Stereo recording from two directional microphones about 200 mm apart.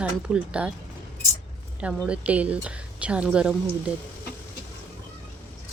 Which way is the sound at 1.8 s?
5° right (ahead or behind).